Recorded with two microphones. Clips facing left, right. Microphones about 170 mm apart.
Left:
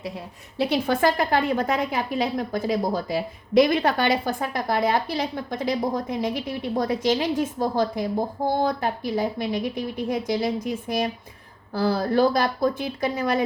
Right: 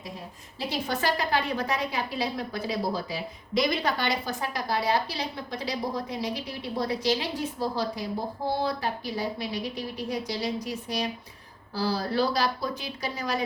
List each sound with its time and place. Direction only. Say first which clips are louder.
0.6 s a woman's voice: left 8 dB; 60° left (ahead or behind)